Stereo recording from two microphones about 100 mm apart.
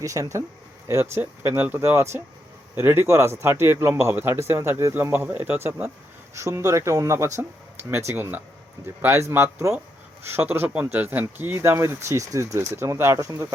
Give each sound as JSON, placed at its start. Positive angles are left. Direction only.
{"t": 0.0, "sound": "speech", "side_deg": -35}